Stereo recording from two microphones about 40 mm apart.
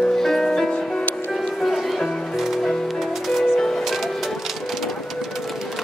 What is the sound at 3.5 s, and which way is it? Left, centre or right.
Music, centre.